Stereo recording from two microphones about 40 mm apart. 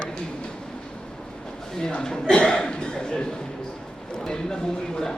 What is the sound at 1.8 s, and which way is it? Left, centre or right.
A man's voice, centre.